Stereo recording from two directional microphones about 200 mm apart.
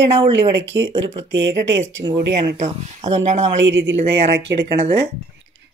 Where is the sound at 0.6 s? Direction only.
65° right (ahead or behind).